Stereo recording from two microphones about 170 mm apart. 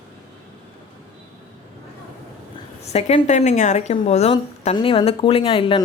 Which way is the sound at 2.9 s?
40° left (ahead or behind).